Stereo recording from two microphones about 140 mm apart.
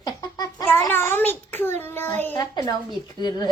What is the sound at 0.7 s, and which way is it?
A child's voice, 15° left (ahead or behind).